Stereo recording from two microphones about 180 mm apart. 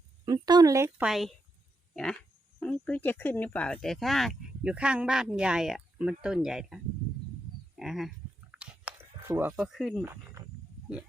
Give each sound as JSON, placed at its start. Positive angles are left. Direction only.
{"t": 0.3, "sound": "speech", "side_deg": -20}
{"t": 1.0, "sound": "speech", "side_deg": 0}
{"t": 2.6, "sound": "speech", "side_deg": 5}
{"t": 7.8, "sound": "goat", "side_deg": 0}
{"t": 8.5, "sound": "a sound", "side_deg": -10}